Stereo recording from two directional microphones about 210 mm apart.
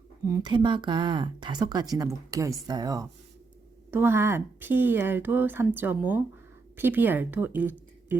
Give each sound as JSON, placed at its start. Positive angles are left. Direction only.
{"t": 0.3, "sound": "a woman's voice", "side_deg": -15}